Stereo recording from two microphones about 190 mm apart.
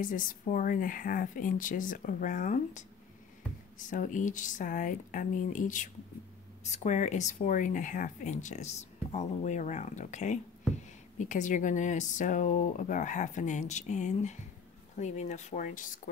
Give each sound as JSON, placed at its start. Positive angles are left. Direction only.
{"t": 0.0, "sound": "speech", "side_deg": 45}